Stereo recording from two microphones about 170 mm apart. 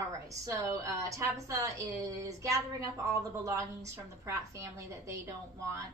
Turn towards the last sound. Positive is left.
turn(degrees=-20)  # may be behind; listen again after turning